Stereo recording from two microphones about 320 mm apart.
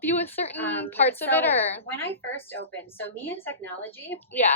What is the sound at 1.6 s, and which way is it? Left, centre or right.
Speech, centre.